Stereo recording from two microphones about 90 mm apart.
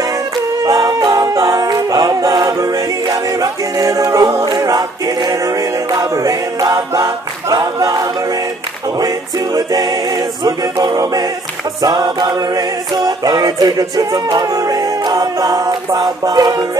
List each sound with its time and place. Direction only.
0.7 s a capella: 45° right (ahead or behind)
3.8 s a capella: 40° right (ahead or behind)
5.9 s a capella: 40° right (ahead or behind)
10.4 s a sound: 45° right (ahead or behind)